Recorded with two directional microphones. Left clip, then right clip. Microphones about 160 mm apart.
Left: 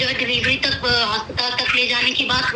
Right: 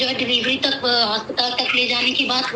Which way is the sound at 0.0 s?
20° left (ahead or behind).